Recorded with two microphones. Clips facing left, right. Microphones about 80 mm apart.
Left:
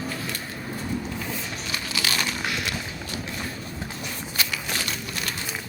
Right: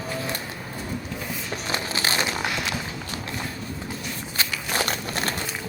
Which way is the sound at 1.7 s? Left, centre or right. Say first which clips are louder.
Right 2 dB; right.